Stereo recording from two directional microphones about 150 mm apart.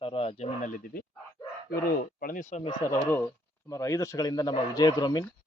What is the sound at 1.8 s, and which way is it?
Speech, 80° left.